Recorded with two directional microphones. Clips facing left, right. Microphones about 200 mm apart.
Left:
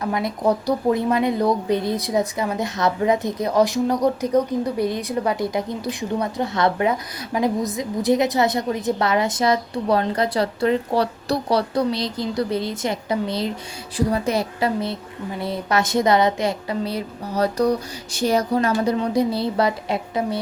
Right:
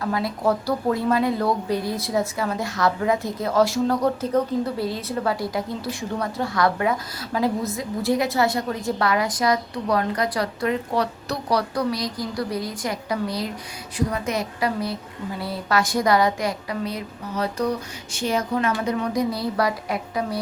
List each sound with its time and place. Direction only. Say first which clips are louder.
0.0 s a woman's voice: left 2 dB; 20° left (ahead or behind)